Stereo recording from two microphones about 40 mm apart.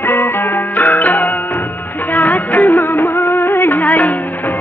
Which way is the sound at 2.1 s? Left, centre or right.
Left.